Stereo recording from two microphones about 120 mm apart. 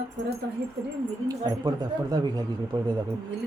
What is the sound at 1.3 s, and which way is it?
Speech, 35° right (ahead or behind).